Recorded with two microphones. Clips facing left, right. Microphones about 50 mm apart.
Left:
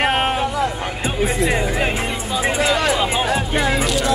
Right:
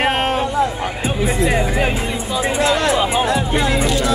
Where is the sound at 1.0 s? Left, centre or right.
Centre.